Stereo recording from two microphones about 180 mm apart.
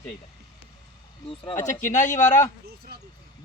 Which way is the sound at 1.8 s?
45° left (ahead or behind).